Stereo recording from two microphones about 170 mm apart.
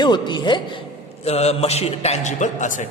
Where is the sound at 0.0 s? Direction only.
25° left (ahead or behind).